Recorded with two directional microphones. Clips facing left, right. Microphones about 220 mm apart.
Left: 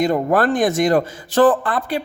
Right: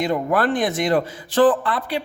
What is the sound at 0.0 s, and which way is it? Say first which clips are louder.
Speech: left 3 dB; 45° left (ahead or behind).